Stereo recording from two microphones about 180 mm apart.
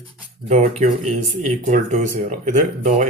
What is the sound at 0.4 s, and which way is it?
Speech, 40° right (ahead or behind).